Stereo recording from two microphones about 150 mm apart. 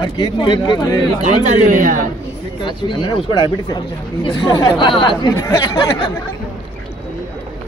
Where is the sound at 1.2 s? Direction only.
55° right (ahead or behind).